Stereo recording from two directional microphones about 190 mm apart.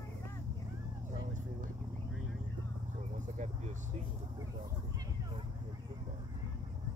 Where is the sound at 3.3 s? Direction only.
40° right (ahead or behind).